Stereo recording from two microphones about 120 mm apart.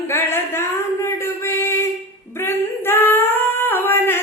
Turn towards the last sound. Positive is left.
turn(degrees=20)  # may be behind; listen again after turning